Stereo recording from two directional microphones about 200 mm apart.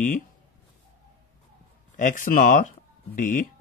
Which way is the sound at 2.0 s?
40° left (ahead or behind).